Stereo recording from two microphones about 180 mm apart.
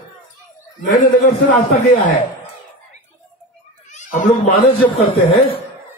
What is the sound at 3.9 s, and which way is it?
Speech, 45° left (ahead or behind).